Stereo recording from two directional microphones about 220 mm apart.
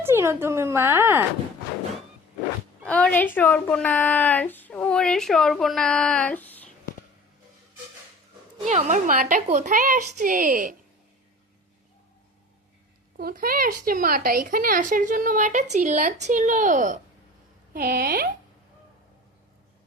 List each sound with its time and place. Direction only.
0.0 s speech: 10° right (ahead or behind)
2.8 s speech: 5° left (ahead or behind)
8.6 s a woman's voice: 30° right (ahead or behind)
13.1 s a woman's voice: 40° right (ahead or behind)